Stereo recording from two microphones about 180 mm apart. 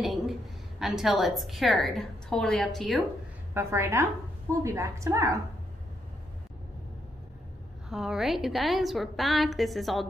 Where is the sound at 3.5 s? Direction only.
15° right (ahead or behind).